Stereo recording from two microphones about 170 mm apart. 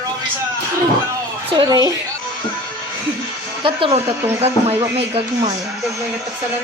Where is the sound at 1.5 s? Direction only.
25° right (ahead or behind).